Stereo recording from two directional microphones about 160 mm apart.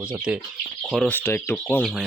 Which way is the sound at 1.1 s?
10° left (ahead or behind).